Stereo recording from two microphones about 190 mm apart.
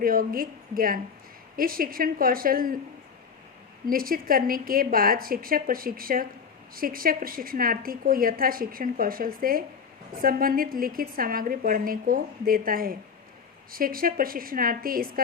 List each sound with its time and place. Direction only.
0.0 s a woman's voice: 50° right (ahead or behind)
3.8 s a woman's voice: 50° right (ahead or behind)